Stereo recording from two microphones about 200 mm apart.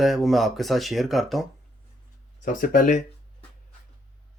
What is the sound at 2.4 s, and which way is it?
Speech, 40° left (ahead or behind).